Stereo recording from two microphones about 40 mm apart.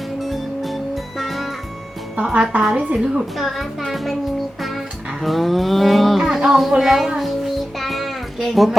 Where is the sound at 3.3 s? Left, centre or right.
Centre.